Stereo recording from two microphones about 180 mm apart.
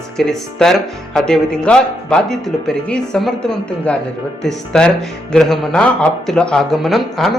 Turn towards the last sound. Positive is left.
turn(degrees=0)  # may be behind; listen again after turning